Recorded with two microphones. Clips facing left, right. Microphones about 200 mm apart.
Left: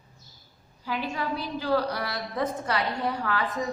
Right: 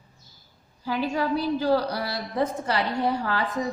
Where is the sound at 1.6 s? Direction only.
30° right (ahead or behind).